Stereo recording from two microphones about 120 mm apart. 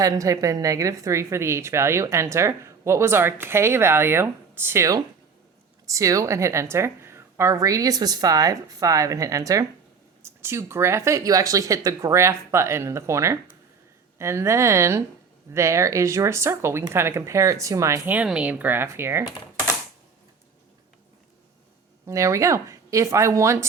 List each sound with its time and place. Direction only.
0.0 s speech: 25° right (ahead or behind)
18.1 s speech: 10° right (ahead or behind)
22.0 s speech: 25° right (ahead or behind)